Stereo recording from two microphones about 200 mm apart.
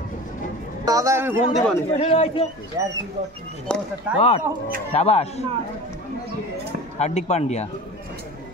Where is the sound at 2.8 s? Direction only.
15° right (ahead or behind).